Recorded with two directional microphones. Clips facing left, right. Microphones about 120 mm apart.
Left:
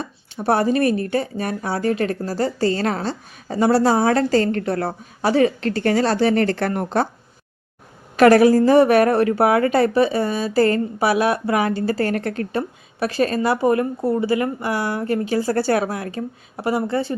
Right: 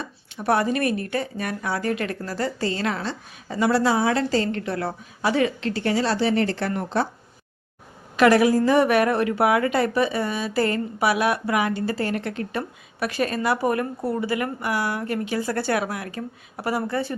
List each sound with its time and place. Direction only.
0.0 s a woman's voice: 30° left (ahead or behind); by 7.1 s 50° left (ahead or behind)
8.1 s a woman's voice: 40° left (ahead or behind)
12.5 s a woman's voice: 30° left (ahead or behind)